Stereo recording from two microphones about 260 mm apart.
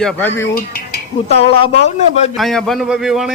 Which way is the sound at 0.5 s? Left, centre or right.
Left.